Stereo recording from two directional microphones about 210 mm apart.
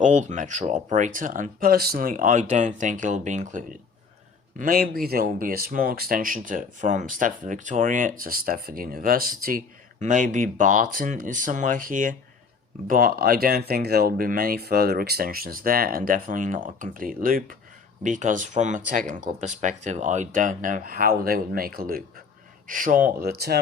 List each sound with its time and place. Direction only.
0.0 s speech: 35° right (ahead or behind)